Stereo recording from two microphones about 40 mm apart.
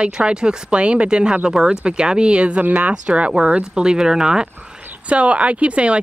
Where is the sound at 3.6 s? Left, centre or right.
Centre.